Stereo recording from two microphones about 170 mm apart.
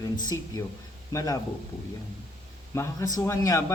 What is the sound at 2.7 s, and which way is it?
Speech, 20° left (ahead or behind).